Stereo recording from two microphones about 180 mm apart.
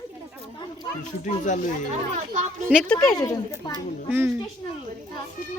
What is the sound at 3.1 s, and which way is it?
Speech, 20° left (ahead or behind).